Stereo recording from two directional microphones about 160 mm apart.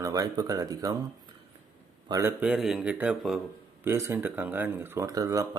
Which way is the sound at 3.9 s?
15° right (ahead or behind).